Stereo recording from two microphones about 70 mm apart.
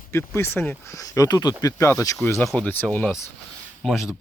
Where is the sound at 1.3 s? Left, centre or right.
Left.